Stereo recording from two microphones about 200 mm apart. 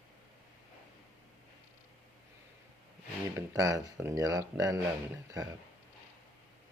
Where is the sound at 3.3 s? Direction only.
15° right (ahead or behind).